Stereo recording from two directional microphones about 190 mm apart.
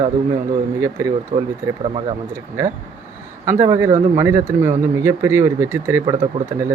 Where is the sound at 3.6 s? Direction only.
20° right (ahead or behind).